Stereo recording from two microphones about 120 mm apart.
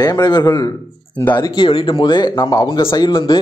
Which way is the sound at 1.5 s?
45° left (ahead or behind).